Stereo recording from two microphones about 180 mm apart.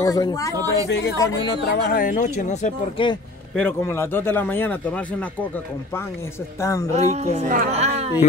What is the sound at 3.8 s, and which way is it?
Speech, 15° left (ahead or behind).